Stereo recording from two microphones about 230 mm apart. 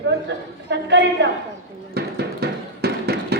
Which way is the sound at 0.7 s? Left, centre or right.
Right.